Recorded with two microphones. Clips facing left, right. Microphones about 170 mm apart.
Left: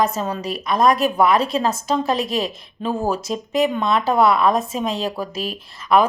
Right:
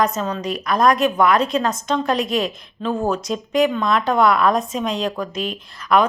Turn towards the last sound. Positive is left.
turn(degrees=5)  # may be behind; listen again after turning